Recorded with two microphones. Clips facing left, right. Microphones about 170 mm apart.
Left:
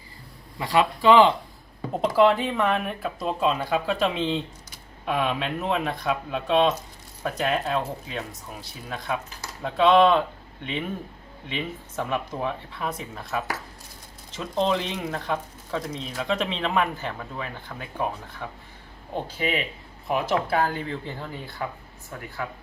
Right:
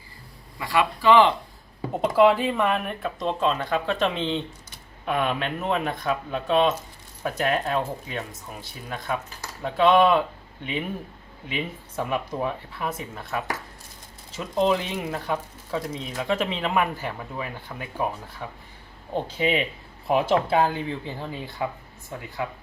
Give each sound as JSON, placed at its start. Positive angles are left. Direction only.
{"t": 0.6, "sound": "speech", "side_deg": 25}
{"t": 1.9, "sound": "speech", "side_deg": 0}
{"t": 19.1, "sound": "speech", "side_deg": -25}